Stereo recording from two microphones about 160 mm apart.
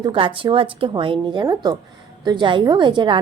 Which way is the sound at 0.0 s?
30° right (ahead or behind).